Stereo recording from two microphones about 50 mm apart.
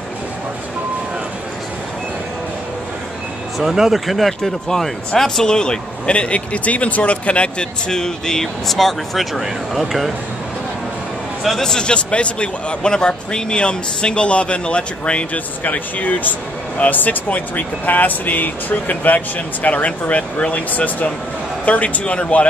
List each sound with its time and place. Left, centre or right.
3.5 s speech: centre
11.6 s a man's voice: centre